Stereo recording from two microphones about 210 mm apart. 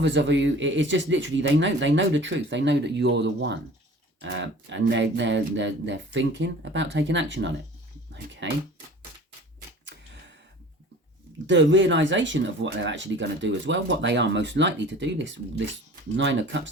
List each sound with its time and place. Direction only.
0.0 s speech: 60° right (ahead or behind)
11.4 s speech: 60° right (ahead or behind)